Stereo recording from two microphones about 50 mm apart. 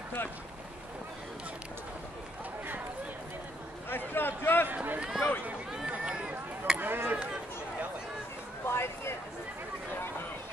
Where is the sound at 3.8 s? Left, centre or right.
Left.